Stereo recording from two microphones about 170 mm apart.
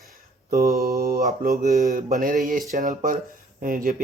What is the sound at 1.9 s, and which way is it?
Speech, 55° right (ahead or behind).